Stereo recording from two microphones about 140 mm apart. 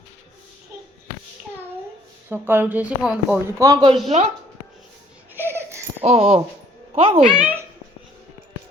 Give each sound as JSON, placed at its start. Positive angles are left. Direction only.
{"t": 2.3, "sound": "speech", "side_deg": -15}
{"t": 3.6, "sound": "a man's voice", "side_deg": -25}
{"t": 4.1, "sound": "speech", "side_deg": -50}
{"t": 5.3, "sound": "a sound", "side_deg": -15}
{"t": 6.0, "sound": "a woman's voice", "side_deg": -45}
{"t": 7.3, "sound": "speech", "side_deg": -10}